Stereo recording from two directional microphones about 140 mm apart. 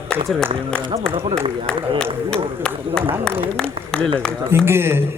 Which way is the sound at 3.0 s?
5° left (ahead or behind).